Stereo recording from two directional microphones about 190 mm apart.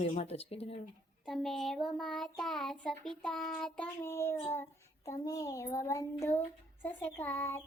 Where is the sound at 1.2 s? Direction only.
Centre (ahead or behind).